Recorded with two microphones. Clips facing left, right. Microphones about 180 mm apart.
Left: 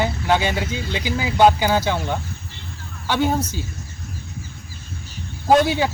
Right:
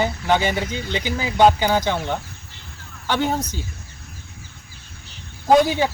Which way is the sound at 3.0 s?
10° left (ahead or behind).